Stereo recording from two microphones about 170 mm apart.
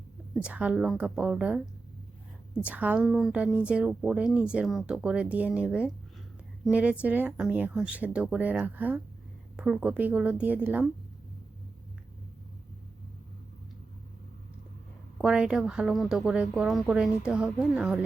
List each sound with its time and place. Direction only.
0.4 s speech: 5° right (ahead or behind)
2.6 s speech: 10° right (ahead or behind)
15.2 s a woman's voice: 5° right (ahead or behind)